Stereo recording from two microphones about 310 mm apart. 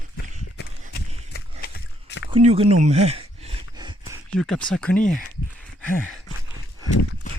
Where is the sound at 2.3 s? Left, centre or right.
Centre.